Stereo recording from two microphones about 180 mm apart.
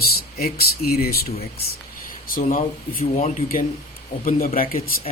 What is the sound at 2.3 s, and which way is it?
Speech, 50° left (ahead or behind).